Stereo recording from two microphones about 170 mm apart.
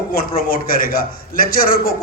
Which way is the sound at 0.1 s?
55° left (ahead or behind).